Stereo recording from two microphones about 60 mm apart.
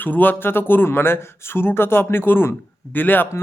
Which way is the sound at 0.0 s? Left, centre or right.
Left.